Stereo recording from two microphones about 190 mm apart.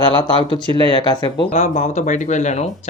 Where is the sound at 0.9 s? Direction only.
25° left (ahead or behind).